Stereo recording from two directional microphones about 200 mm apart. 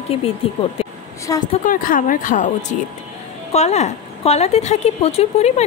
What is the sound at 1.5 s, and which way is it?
A woman's voice, 40° left (ahead or behind).